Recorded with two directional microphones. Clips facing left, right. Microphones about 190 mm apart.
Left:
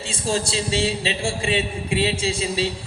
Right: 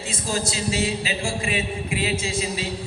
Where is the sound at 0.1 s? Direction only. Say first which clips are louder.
Left 3 dB; 30° left (ahead or behind).